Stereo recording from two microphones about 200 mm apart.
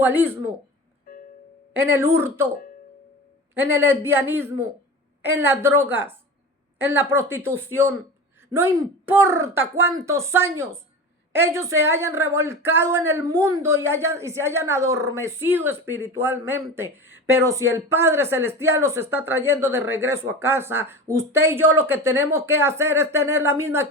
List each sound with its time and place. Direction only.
0.0 s speech: 10° right (ahead or behind)
1.1 s music: 45° left (ahead or behind)
1.7 s speech: 10° right (ahead or behind)
3.5 s speech: 10° right (ahead or behind)